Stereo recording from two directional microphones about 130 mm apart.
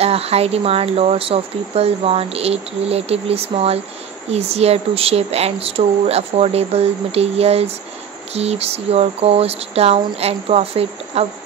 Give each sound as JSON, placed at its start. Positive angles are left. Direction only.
{"t": 0.0, "sound": "speech", "side_deg": -50}